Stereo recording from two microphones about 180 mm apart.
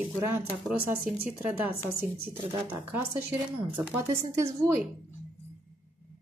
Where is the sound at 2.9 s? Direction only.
10° right (ahead or behind).